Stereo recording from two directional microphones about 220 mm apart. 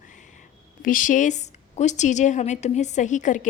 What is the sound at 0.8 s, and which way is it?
A woman's voice, 35° left (ahead or behind).